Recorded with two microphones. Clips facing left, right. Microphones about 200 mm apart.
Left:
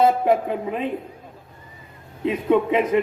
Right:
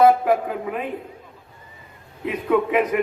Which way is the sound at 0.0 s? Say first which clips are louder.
Right 2 dB; 25° left (ahead or behind).